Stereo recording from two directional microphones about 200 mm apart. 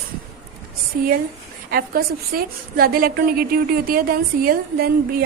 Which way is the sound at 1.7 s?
50° right (ahead or behind).